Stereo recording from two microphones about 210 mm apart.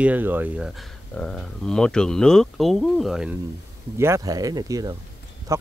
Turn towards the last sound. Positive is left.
turn(degrees=-15)  # may be behind; listen again after turning